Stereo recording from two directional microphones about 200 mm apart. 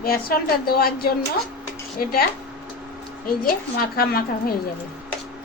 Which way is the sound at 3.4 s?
45° left (ahead or behind).